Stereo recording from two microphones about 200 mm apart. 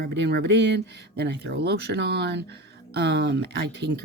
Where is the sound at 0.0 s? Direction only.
55° right (ahead or behind).